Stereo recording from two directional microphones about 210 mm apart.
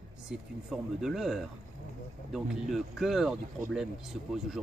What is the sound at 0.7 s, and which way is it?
Speech, centre (ahead or behind).